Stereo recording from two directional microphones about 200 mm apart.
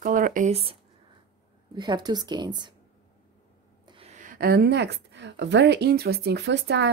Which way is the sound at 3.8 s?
25° right (ahead or behind).